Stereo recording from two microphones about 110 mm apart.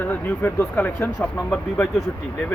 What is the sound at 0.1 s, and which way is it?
Speech, 20° left (ahead or behind).